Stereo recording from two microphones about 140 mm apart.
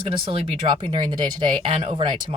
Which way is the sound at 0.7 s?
35° right (ahead or behind).